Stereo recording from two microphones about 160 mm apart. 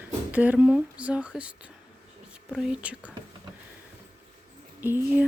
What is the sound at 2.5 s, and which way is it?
Speech, 5° right (ahead or behind).